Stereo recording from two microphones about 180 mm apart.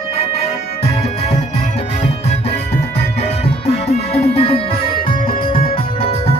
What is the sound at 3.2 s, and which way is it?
Music, 35° left (ahead or behind).